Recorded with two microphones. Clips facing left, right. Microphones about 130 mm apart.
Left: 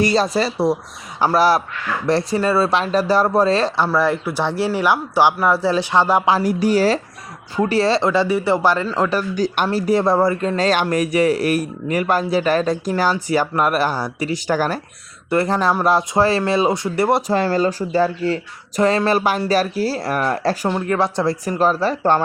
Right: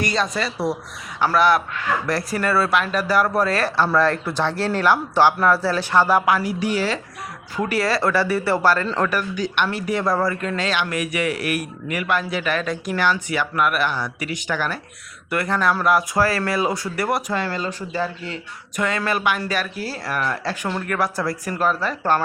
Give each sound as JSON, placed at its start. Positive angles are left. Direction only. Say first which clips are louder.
{"t": 0.0, "sound": "speech", "louder": "left 6 dB", "side_deg": 35}
{"t": 3.8, "sound": "speech", "louder": "left 1 dB", "side_deg": 10}
{"t": 6.4, "sound": "speech", "louder": "left 6 dB", "side_deg": 40}
{"t": 7.5, "sound": "speech", "louder": "left 5 dB", "side_deg": 30}
{"t": 9.0, "sound": "speech", "louder": "left 4 dB", "side_deg": 25}
{"t": 10.6, "sound": "speech", "louder": "left 7 dB", "side_deg": 40}
{"t": 15.3, "sound": "speech", "louder": "left 4 dB", "side_deg": 30}
{"t": 20.7, "sound": "speech", "louder": "left 2 dB", "side_deg": 25}